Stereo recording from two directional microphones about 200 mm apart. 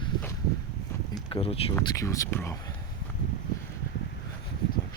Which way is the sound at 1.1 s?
25° left (ahead or behind).